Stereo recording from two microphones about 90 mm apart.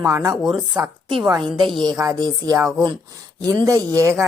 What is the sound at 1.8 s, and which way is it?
Speech, 45° right (ahead or behind).